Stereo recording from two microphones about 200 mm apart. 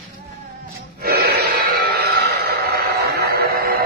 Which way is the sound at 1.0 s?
50° right (ahead or behind).